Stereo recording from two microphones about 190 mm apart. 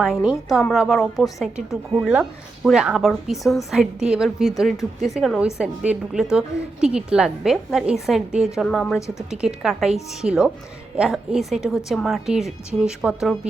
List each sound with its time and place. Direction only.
0.0 s a woman's voice: 5° right (ahead or behind)
9.0 s speech: 15° left (ahead or behind)
9.3 s a woman's voice: 5° right (ahead or behind)